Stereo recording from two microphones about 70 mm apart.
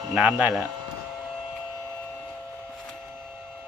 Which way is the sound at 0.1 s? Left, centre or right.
Centre.